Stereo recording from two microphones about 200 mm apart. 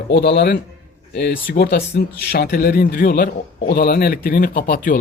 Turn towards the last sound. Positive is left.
turn(degrees=45)  # may be behind; listen again after turning